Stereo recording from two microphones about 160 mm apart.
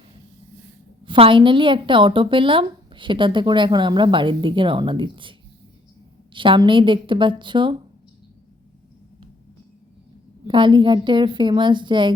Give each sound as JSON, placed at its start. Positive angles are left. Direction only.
{"t": 1.0, "sound": "speech", "side_deg": -35}
{"t": 6.3, "sound": "speech", "side_deg": -30}
{"t": 10.4, "sound": "a woman's voice", "side_deg": -30}